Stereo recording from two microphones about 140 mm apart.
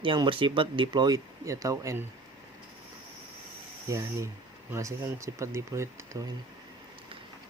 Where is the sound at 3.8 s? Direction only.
25° right (ahead or behind).